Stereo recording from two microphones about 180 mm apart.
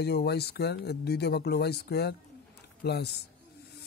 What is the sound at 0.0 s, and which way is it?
Speech, 65° left (ahead or behind).